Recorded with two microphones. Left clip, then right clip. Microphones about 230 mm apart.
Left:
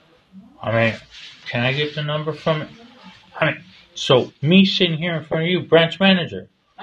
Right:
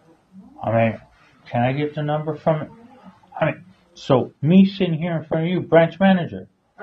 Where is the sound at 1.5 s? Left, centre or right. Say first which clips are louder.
Left 1 dB; left.